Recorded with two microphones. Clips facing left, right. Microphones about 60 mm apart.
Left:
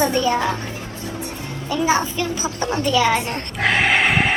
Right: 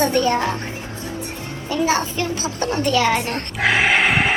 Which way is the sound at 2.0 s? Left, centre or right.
Right.